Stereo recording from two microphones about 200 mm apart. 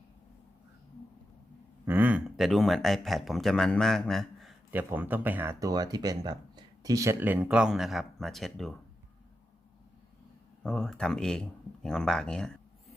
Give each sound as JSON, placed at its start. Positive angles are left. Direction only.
{"t": 1.8, "sound": "speech", "side_deg": -10}
{"t": 10.6, "sound": "speech", "side_deg": 5}